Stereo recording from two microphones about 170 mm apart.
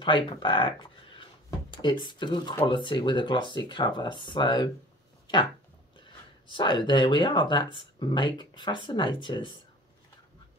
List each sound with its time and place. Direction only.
0.0 s speech: 30° left (ahead or behind)
5.2 s a sound: 30° left (ahead or behind)
6.4 s speech: 30° left (ahead or behind)